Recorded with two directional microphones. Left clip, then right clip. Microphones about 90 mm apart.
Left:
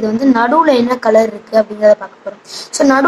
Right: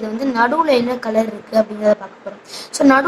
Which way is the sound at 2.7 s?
20° left (ahead or behind).